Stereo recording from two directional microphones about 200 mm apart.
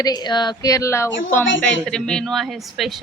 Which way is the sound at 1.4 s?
70° left (ahead or behind).